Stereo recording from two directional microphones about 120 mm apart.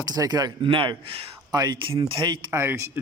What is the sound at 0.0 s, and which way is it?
Speech, 35° right (ahead or behind).